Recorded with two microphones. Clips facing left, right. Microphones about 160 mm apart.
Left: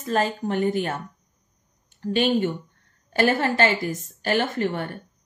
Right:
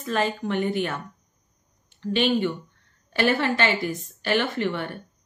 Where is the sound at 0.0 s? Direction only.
40° left (ahead or behind).